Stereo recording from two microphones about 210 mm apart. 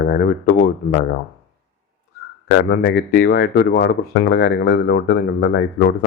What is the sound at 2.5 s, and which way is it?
Speech, 50° left (ahead or behind).